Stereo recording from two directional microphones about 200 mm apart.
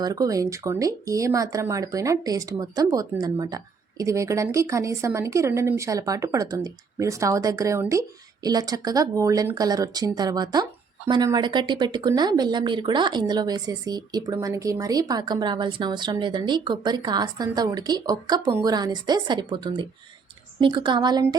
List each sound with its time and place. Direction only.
0.0 s speech: 20° right (ahead or behind)